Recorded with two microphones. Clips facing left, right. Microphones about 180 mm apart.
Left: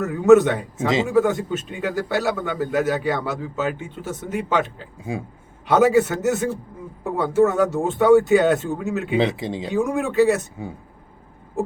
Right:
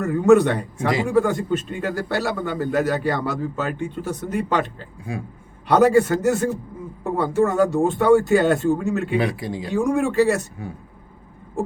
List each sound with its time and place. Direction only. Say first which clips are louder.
0.0 s a man's voice: left 1 dB; centre (ahead or behind)
0.8 s speech: left 2 dB; 25° left (ahead or behind)
1.0 s a man's voice: even; centre (ahead or behind)
9.1 s speech: left 2 dB; 25° left (ahead or behind)
9.6 s a man's voice: right 2 dB; centre (ahead or behind)